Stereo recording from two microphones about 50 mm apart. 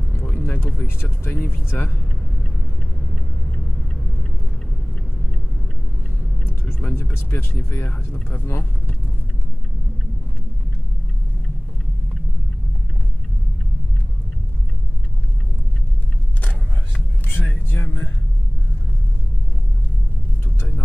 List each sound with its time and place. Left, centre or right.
0.2 s speech: left
6.4 s speech: left
16.3 s vehicle: left
20.4 s vehicle: left